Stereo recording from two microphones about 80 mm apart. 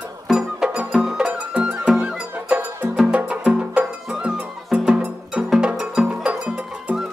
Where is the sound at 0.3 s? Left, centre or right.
Centre.